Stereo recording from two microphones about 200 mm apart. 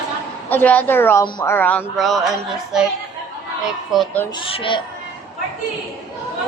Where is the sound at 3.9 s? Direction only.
Centre (ahead or behind).